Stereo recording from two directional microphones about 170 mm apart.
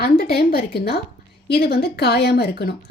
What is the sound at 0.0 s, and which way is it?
A woman's voice, 65° left (ahead or behind).